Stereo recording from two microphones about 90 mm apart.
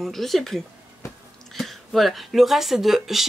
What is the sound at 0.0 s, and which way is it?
Speech, centre (ahead or behind).